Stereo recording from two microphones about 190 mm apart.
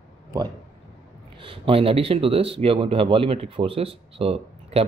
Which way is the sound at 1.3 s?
25° right (ahead or behind).